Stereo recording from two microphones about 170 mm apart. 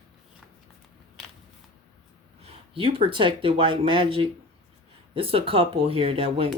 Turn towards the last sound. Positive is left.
turn(degrees=-35)  # may be behind; listen again after turning